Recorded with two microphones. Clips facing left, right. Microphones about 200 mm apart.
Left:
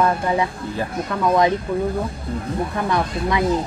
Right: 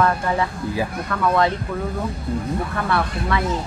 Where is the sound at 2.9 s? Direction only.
15° left (ahead or behind).